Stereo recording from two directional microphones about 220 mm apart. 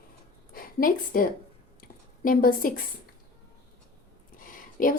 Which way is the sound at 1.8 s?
40° left (ahead or behind).